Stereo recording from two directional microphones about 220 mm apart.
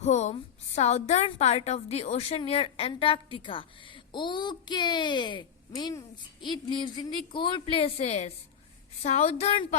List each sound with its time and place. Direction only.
0.0 s a woman's voice: 30° left (ahead or behind)